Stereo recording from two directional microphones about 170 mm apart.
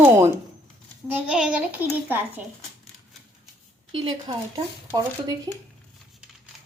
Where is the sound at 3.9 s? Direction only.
30° right (ahead or behind).